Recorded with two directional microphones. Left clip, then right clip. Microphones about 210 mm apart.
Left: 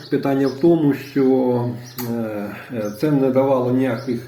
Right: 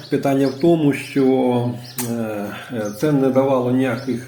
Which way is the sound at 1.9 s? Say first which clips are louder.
Even; 30° right (ahead or behind).